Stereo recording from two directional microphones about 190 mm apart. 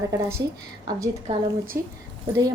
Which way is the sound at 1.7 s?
55° right (ahead or behind).